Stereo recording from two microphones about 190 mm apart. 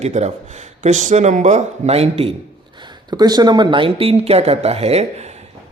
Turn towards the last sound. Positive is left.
turn(degrees=-35)  # may be behind; listen again after turning